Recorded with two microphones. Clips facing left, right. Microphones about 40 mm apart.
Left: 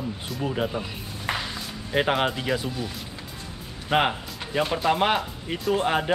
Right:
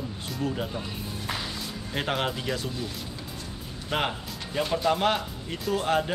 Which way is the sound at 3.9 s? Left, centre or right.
Left.